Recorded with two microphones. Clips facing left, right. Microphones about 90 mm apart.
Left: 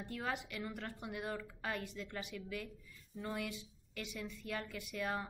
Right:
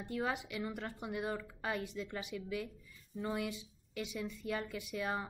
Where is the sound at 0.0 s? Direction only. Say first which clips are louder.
Right 4 dB; 5° right (ahead or behind).